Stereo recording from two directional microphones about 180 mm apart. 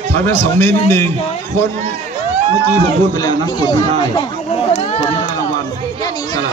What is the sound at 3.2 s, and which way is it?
Speech, 20° left (ahead or behind).